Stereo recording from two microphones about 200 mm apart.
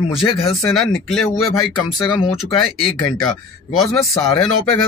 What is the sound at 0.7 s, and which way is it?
Speech, centre (ahead or behind).